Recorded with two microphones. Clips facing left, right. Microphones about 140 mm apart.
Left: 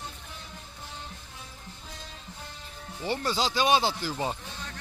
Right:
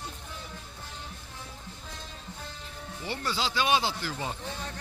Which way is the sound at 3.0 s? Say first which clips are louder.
Left 4 dB; 40° left (ahead or behind).